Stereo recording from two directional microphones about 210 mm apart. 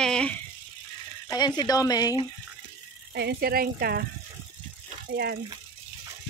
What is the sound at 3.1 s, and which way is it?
Speech, 50° right (ahead or behind).